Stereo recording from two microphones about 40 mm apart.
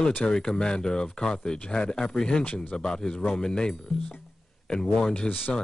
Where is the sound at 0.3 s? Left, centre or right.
Centre.